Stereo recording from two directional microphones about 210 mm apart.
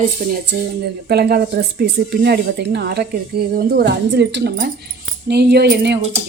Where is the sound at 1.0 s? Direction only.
50° right (ahead or behind).